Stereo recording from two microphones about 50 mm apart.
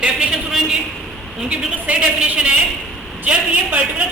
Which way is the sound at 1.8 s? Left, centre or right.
Right.